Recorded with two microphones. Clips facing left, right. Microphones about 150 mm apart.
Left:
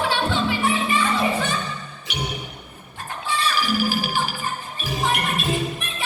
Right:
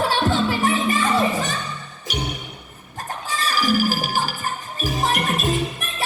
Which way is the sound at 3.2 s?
40° right (ahead or behind).